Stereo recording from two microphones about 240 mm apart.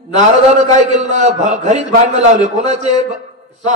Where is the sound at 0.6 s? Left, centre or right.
Right.